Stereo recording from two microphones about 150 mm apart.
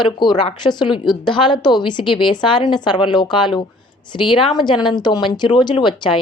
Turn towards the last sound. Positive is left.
turn(degrees=30)  # may be behind; listen again after turning